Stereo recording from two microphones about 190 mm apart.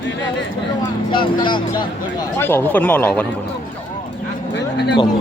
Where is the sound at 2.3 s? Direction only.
10° left (ahead or behind).